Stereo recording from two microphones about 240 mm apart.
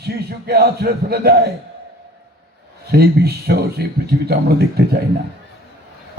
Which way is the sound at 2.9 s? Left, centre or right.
Right.